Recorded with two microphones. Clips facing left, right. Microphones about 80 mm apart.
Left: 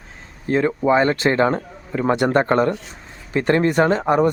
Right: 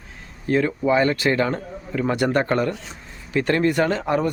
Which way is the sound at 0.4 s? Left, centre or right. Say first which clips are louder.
Left 2 dB; left.